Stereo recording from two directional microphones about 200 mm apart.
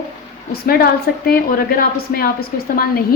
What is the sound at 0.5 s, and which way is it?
A woman's voice, 50° left (ahead or behind).